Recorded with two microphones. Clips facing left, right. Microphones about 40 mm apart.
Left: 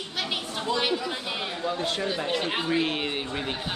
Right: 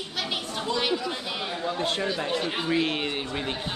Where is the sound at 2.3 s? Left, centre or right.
Centre.